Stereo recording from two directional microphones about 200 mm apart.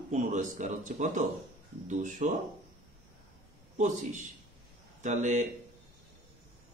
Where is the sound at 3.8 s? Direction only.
40° right (ahead or behind).